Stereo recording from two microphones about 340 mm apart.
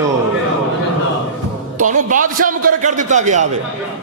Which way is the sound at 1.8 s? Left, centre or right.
Right.